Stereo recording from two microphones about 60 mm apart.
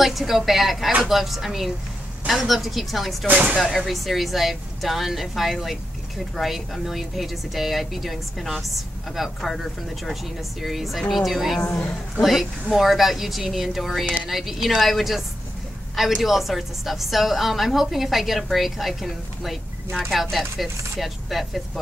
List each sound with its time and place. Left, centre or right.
0.0 s a woman's voice: centre
3.3 s speech: right
3.5 s a woman's voice: centre
10.6 s a woman's voice: centre